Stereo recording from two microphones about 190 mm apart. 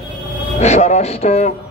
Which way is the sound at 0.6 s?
35° left (ahead or behind).